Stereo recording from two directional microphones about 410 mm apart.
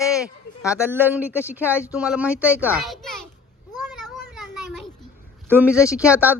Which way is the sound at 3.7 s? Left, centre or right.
Centre.